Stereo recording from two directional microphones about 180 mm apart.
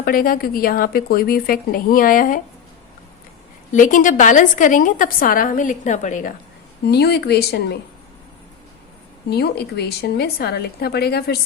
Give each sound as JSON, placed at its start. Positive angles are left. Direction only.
{"t": 0.0, "sound": "a woman's voice", "side_deg": 55}
{"t": 3.7, "sound": "a woman's voice", "side_deg": 45}
{"t": 6.9, "sound": "a woman's voice", "side_deg": 65}
{"t": 9.3, "sound": "a woman's voice", "side_deg": 65}